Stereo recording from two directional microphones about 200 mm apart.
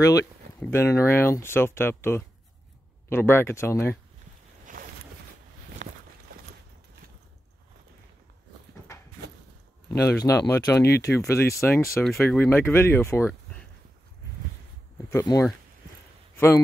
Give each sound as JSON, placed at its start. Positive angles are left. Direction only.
{"t": 0.0, "sound": "speech", "side_deg": 15}
{"t": 4.7, "sound": "boat", "side_deg": -40}
{"t": 9.9, "sound": "speech", "side_deg": 15}
{"t": 15.0, "sound": "a man's voice", "side_deg": 15}